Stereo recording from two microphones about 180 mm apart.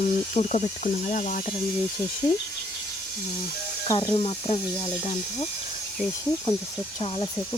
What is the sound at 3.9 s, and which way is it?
Speech, 25° left (ahead or behind).